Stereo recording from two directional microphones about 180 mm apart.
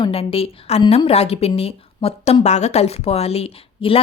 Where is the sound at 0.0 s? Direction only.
30° left (ahead or behind).